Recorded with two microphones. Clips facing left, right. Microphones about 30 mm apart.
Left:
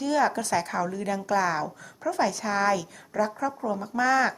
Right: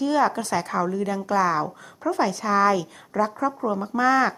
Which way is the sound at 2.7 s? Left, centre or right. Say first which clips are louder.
Right 3 dB; right.